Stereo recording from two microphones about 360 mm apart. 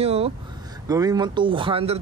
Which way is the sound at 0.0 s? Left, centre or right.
Centre.